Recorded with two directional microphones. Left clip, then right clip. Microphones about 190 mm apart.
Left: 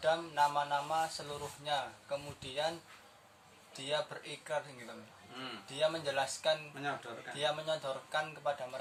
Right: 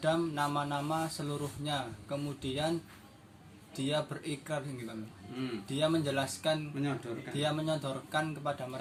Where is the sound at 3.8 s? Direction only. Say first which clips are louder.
Right 3 dB; 20° right (ahead or behind).